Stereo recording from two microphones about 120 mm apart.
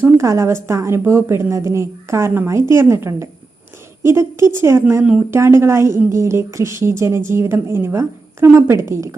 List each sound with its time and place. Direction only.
0.0 s a woman's voice: 25° right (ahead or behind)